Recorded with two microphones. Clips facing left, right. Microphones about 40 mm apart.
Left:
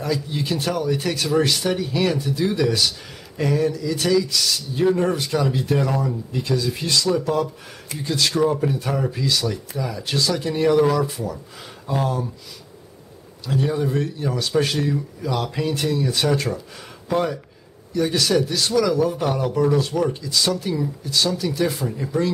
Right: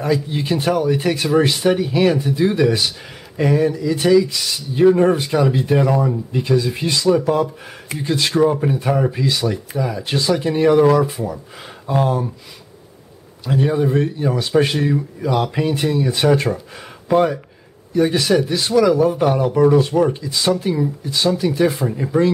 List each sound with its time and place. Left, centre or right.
0.0 s speech: centre
13.5 s speech: centre